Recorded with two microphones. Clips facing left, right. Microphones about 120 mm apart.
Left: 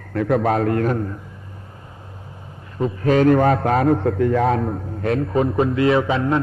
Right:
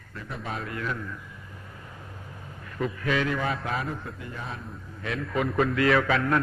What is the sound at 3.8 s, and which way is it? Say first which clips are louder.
A man's voice: left 18 dB; 65° left (ahead or behind).